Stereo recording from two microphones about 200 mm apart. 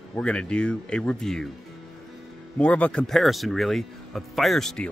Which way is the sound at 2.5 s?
5° left (ahead or behind).